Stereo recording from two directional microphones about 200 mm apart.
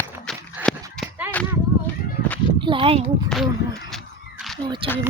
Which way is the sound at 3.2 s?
Centre (ahead or behind).